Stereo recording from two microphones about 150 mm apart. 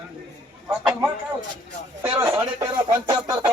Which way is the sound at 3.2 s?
20° right (ahead or behind).